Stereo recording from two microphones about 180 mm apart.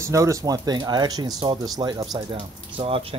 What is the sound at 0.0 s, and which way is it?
Speech, 15° right (ahead or behind).